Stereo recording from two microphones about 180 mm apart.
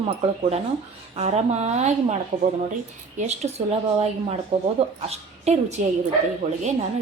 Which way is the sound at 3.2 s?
40° right (ahead or behind).